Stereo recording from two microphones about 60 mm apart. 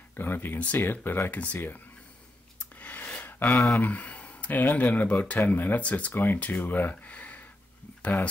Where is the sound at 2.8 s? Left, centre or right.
Left.